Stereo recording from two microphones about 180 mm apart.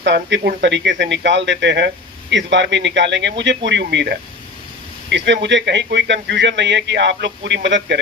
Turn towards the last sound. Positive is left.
turn(degrees=-80)